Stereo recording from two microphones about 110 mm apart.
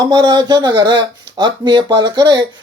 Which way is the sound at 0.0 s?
40° right (ahead or behind).